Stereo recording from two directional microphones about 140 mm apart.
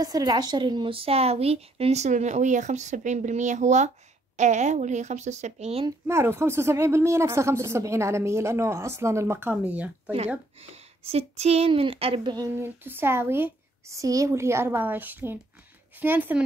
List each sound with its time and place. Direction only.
0.0 s a woman's voice: 25° right (ahead or behind); by 5.9 s 50° right (ahead or behind)
5.9 s speech: 20° right (ahead or behind)
10.6 s a woman's voice: 45° right (ahead or behind); by 12.4 s 30° right (ahead or behind)
12.8 s a woman's voice: 15° right (ahead or behind)